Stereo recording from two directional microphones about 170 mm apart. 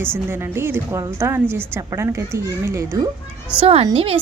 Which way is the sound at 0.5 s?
15° right (ahead or behind).